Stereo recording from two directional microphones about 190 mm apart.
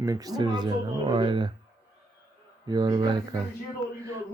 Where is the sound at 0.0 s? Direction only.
20° right (ahead or behind).